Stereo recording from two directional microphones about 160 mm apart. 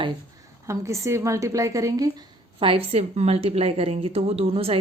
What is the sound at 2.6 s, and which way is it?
A woman's voice, 35° right (ahead or behind).